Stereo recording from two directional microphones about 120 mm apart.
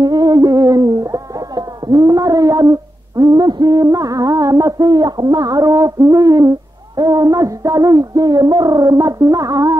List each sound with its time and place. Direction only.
0.0 s music: 35° right (ahead or behind)